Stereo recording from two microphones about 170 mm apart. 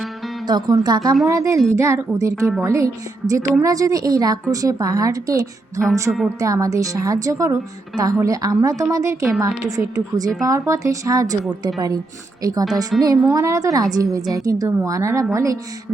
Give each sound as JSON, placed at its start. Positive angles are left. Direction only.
{"t": 0.4, "sound": "a woman's voice", "side_deg": -25}
{"t": 2.3, "sound": "a woman's voice", "side_deg": 0}
{"t": 2.6, "sound": "a woman's voice", "side_deg": -15}
{"t": 6.1, "sound": "a woman's voice", "side_deg": -5}
{"t": 6.4, "sound": "a woman's voice", "side_deg": -20}
{"t": 12.4, "sound": "speech", "side_deg": -20}
{"t": 12.9, "sound": "a woman's voice", "side_deg": 0}
{"t": 13.3, "sound": "a woman's voice", "side_deg": -20}